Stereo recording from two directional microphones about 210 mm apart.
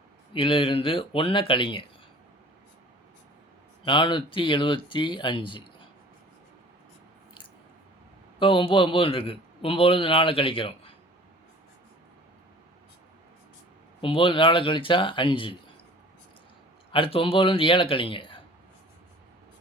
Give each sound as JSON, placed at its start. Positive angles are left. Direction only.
{"t": 0.3, "sound": "speech", "side_deg": 25}
{"t": 3.8, "sound": "speech", "side_deg": 25}
{"t": 8.4, "sound": "speech", "side_deg": 25}
{"t": 14.0, "sound": "speech", "side_deg": 25}
{"t": 16.9, "sound": "speech", "side_deg": 25}